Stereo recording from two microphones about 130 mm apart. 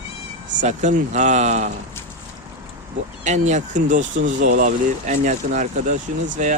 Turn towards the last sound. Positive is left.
turn(degrees=-75)  # may be behind; listen again after turning